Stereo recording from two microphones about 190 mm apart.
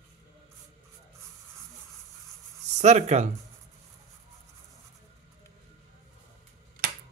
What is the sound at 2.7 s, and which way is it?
Speech, 35° right (ahead or behind).